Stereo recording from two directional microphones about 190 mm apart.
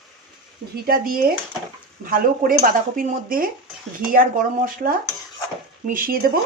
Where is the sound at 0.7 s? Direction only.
50° right (ahead or behind).